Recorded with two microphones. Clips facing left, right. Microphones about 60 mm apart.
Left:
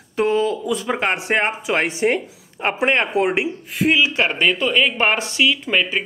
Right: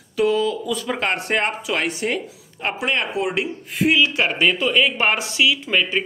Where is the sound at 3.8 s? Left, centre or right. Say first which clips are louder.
Left 1 dB; centre.